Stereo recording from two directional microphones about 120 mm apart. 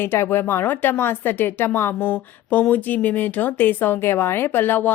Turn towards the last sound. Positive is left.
turn(degrees=15)  # may be behind; listen again after turning